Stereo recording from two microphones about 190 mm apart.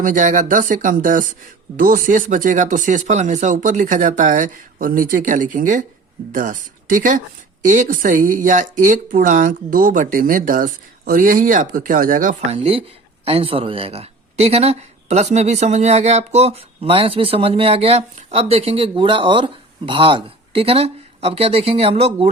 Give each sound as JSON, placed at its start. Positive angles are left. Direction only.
{"t": 0.0, "sound": "speech", "side_deg": -40}
{"t": 7.7, "sound": "speech", "side_deg": -40}